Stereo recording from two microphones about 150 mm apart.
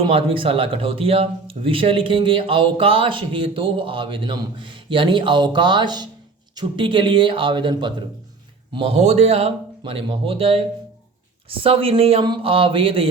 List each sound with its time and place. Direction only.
0.0 s speech: 35° right (ahead or behind)
8.7 s speech: 40° right (ahead or behind)